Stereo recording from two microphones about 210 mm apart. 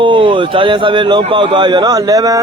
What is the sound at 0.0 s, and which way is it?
Speech, 25° right (ahead or behind).